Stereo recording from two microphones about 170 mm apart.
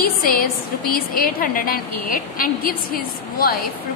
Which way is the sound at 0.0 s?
60° left (ahead or behind).